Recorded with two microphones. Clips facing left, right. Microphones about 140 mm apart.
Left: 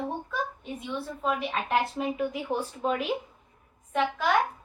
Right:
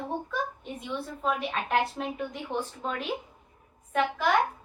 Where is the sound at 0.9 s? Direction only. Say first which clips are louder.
Even; centre (ahead or behind).